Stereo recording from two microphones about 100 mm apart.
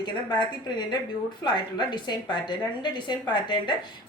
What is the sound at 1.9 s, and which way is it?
A woman's voice, 50° left (ahead or behind).